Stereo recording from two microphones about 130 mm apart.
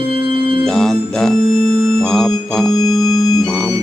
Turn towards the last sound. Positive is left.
turn(degrees=35)  # may be behind; listen again after turning